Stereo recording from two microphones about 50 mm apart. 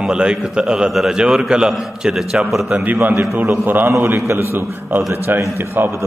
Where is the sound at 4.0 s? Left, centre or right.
Right.